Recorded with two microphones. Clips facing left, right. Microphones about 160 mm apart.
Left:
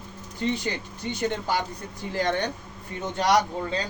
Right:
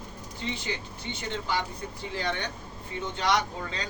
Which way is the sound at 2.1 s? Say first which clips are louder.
Left 7 dB; 45° left (ahead or behind).